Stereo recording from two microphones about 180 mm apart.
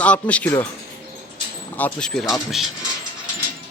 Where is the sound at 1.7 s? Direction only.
5° left (ahead or behind).